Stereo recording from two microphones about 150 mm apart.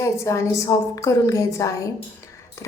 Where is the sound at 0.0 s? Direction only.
20° left (ahead or behind).